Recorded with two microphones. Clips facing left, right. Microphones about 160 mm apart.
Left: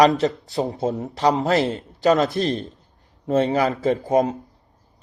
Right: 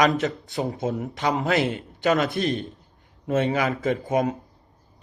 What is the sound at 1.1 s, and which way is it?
A man's voice, 35° left (ahead or behind).